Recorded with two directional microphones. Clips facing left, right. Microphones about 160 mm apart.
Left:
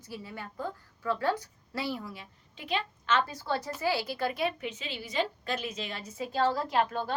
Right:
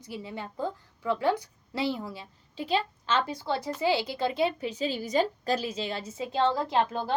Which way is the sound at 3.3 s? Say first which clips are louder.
Right 2 dB; 15° right (ahead or behind).